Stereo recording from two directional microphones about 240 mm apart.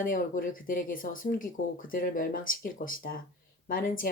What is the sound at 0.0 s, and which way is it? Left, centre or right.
Speech, left.